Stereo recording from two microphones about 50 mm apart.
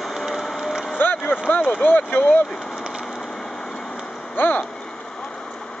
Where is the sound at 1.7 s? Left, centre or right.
Left.